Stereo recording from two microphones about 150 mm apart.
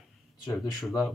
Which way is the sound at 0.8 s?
Centre (ahead or behind).